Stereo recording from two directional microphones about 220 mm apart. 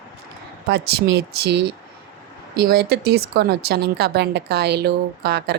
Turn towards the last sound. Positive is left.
turn(degrees=-45)  # may be behind; listen again after turning